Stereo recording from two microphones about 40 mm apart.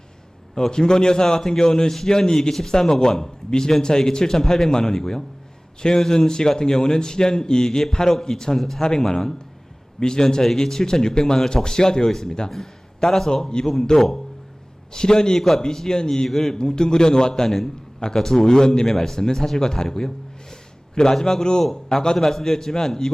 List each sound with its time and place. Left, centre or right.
0.5 s a man's voice: centre